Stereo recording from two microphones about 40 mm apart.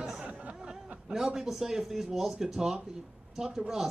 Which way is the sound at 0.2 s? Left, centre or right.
Right.